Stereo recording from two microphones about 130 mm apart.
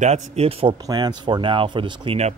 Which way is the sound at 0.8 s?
30° right (ahead or behind).